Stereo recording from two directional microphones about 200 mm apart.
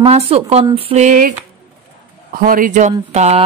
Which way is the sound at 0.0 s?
30° right (ahead or behind).